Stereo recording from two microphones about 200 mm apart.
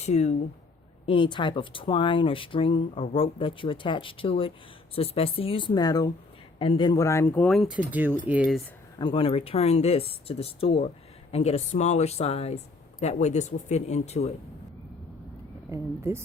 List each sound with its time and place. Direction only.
0.0 s speech: 35° left (ahead or behind); by 8.6 s 5° right (ahead or behind)
9.0 s speech: 25° left (ahead or behind)
15.7 s speech: 15° right (ahead or behind)